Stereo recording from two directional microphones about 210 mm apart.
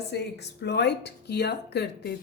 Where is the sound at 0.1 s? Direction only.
55° left (ahead or behind).